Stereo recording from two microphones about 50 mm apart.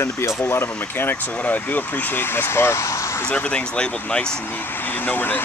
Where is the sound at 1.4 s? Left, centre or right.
Left.